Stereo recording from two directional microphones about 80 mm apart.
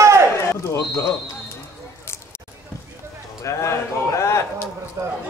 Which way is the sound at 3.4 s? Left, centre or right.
Left.